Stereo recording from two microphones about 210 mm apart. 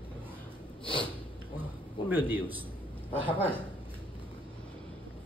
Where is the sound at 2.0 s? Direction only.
10° right (ahead or behind).